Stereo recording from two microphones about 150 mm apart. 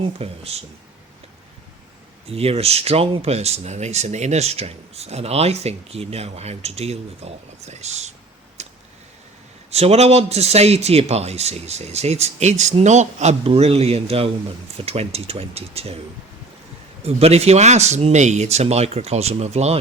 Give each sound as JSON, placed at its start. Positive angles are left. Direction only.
{"t": 0.2, "sound": "speech", "side_deg": -40}
{"t": 2.3, "sound": "speech", "side_deg": -40}
{"t": 8.6, "sound": "a sound", "side_deg": -50}
{"t": 9.6, "sound": "speech", "side_deg": -45}
{"t": 17.0, "sound": "speech", "side_deg": -45}